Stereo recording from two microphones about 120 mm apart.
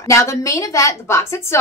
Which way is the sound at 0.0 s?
25° left (ahead or behind).